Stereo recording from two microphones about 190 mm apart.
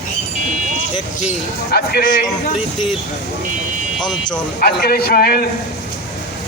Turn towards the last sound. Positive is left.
turn(degrees=55)  # may be behind; listen again after turning